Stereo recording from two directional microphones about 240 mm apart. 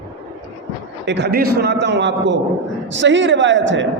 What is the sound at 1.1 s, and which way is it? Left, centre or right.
A man's voice, right.